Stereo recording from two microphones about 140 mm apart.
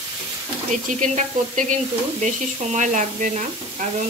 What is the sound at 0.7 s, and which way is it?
Speech, 60° right (ahead or behind).